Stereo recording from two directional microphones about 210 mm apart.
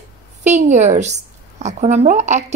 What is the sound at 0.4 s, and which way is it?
A woman's voice, 35° right (ahead or behind).